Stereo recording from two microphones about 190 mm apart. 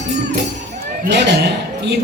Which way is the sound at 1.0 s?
60° right (ahead or behind).